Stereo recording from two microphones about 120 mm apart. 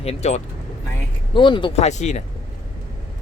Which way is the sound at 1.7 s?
70° left (ahead or behind).